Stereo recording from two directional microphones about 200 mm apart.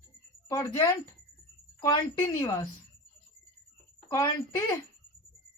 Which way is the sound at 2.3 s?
15° left (ahead or behind).